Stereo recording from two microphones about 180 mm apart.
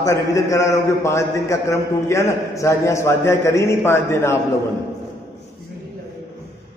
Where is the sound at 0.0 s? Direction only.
15° left (ahead or behind).